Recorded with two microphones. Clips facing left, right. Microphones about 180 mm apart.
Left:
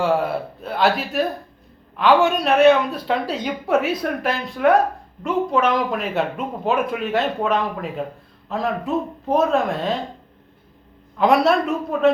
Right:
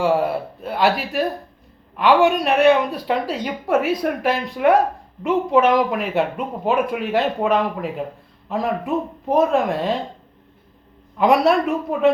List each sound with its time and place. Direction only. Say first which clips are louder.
0.0 s a sound: right 1 dB; 10° right (ahead or behind)
2.2 s speech: left 1 dB; 15° right (ahead or behind)
11.2 s speech: right 1 dB; 15° right (ahead or behind)